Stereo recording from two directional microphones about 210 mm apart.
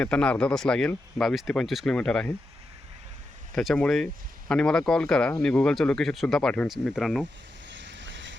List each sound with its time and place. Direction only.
0.0 s speech: 5° left (ahead or behind)
3.5 s speech: centre (ahead or behind)
7.7 s boat: 60° right (ahead or behind)